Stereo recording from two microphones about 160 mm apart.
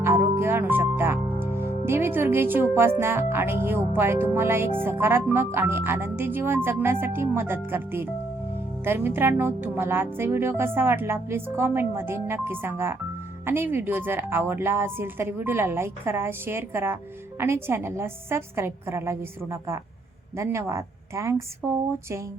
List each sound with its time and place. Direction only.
0.0 s music: 15° right (ahead or behind)
3.9 s a woman's voice: 15° right (ahead or behind)